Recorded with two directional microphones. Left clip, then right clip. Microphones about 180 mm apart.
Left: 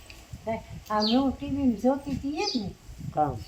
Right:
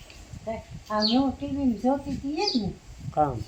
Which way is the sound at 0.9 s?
20° left (ahead or behind).